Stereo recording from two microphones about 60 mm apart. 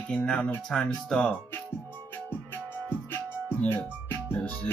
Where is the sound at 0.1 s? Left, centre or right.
Centre.